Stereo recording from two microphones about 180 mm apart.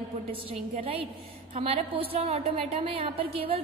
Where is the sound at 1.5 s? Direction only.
35° right (ahead or behind).